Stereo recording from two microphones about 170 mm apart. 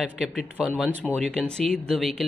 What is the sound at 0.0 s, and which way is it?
A woman's voice, centre (ahead or behind).